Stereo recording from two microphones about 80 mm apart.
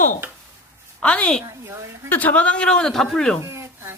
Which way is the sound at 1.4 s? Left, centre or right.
Right.